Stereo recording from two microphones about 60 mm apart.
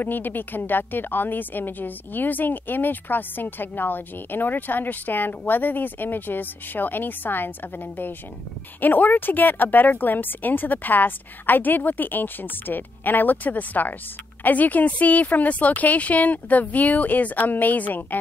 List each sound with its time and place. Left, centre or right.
0.0 s a woman's voice: left